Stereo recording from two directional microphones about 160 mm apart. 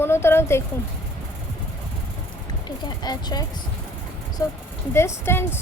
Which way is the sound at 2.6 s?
25° left (ahead or behind).